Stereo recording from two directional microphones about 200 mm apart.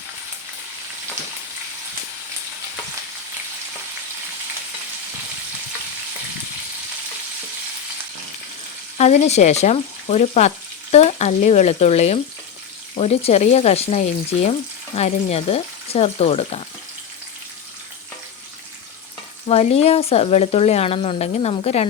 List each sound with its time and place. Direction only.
9.0 s speech: 35° left (ahead or behind)
19.5 s speech: 30° left (ahead or behind)